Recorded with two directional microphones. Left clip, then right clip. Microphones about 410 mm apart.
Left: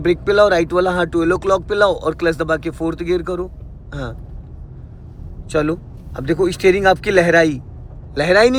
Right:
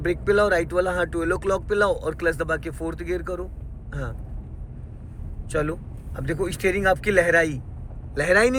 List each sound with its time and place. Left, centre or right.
0.0 s speech: centre
5.5 s speech: centre